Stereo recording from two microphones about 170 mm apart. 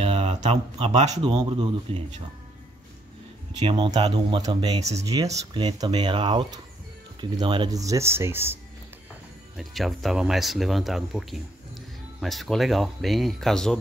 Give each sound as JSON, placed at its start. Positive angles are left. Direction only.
{"t": 0.0, "sound": "a sound", "side_deg": -35}
{"t": 1.1, "sound": "speech", "side_deg": -25}
{"t": 3.5, "sound": "speech", "side_deg": -25}
{"t": 9.6, "sound": "speech", "side_deg": 0}